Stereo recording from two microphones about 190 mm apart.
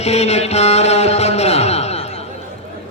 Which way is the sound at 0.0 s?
35° left (ahead or behind).